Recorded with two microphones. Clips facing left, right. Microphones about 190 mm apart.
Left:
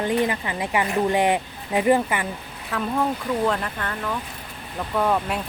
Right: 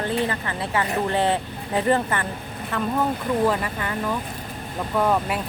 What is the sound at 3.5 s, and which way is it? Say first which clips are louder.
Speech: right 1 dB; 5° right (ahead or behind).